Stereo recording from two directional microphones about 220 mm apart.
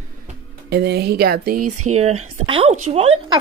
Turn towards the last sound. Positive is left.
turn(degrees=-25)  # may be behind; listen again after turning